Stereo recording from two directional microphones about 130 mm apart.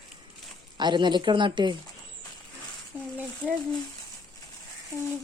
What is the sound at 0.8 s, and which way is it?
Speech, 35° right (ahead or behind).